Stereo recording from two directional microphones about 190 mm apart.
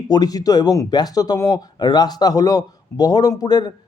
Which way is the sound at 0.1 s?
20° left (ahead or behind).